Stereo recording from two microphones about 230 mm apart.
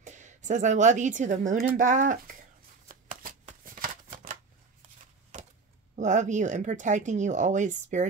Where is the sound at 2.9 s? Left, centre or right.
Right.